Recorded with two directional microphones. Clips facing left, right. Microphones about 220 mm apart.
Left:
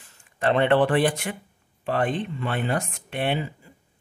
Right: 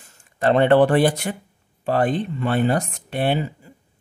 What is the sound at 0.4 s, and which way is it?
A man's voice, 40° right (ahead or behind).